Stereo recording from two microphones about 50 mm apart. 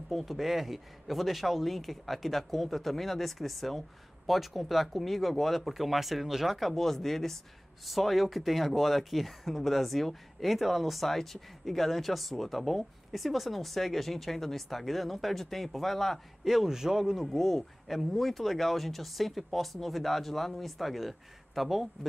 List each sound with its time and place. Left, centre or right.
0.1 s speech: centre
6.7 s speech: centre
16.4 s speech: centre
17.4 s speech: centre